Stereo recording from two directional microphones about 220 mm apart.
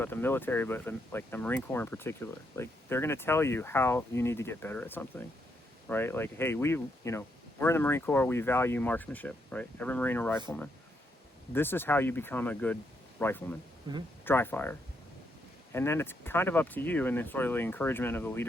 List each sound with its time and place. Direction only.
0.0 s speech: 10° left (ahead or behind)
11.5 s a man's voice: 10° left (ahead or behind)